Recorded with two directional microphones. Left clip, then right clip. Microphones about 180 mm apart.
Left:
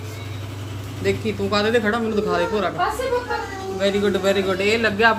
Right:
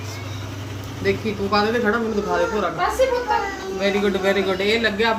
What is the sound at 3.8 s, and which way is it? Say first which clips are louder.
Speech: left 1 dB; centre (ahead or behind).